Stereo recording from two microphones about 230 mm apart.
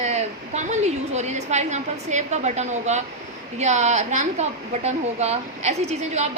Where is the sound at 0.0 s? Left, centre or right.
Right.